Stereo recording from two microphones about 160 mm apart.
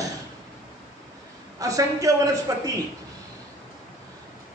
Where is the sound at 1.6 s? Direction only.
20° right (ahead or behind).